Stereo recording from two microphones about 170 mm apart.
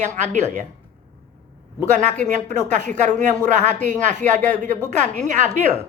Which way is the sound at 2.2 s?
45° right (ahead or behind).